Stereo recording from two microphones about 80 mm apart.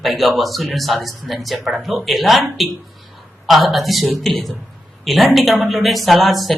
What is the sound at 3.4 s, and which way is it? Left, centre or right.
Speech, centre.